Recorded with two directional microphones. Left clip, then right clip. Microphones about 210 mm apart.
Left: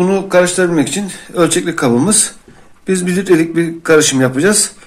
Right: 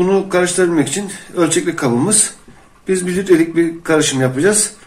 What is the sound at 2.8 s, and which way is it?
Speech, 45° left (ahead or behind).